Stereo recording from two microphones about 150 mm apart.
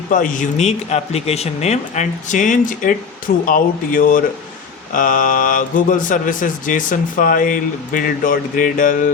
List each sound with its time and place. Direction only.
0.1 s speech: 60° left (ahead or behind)